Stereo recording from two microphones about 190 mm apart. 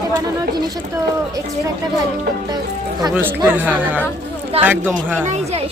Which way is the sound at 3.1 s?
10° right (ahead or behind).